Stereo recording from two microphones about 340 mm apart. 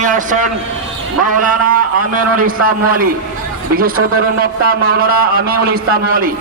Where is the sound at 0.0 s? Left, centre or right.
Right.